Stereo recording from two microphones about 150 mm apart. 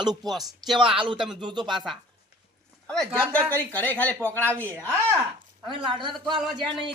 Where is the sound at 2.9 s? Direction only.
5° left (ahead or behind).